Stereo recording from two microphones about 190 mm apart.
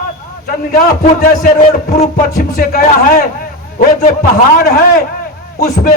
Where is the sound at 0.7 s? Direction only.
40° left (ahead or behind).